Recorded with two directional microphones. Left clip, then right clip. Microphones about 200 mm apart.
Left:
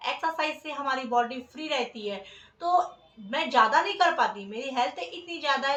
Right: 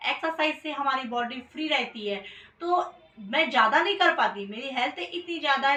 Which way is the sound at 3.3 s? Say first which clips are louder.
Right 1 dB; 20° left (ahead or behind).